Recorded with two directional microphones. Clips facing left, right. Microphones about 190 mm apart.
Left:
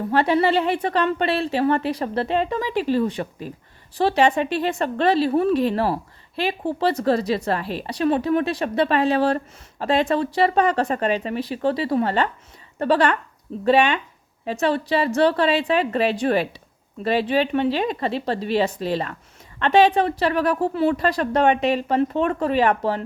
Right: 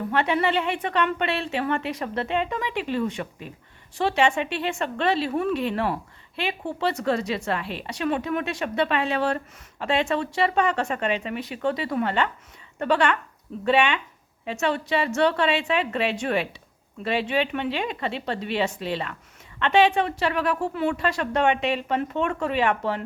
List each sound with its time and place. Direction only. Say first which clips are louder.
0.1 s a woman's voice: left 5 dB; 35° left (ahead or behind)